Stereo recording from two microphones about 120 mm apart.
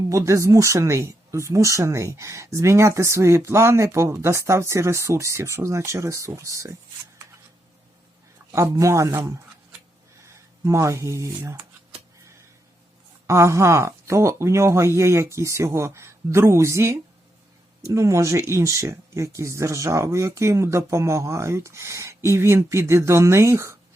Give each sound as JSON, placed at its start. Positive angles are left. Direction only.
{"t": 0.1, "sound": "speech", "side_deg": -25}
{"t": 8.5, "sound": "speech", "side_deg": -25}
{"t": 13.2, "sound": "speech", "side_deg": -25}